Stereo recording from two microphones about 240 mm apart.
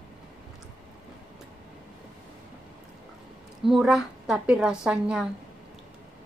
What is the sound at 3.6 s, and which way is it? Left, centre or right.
A woman's voice, centre.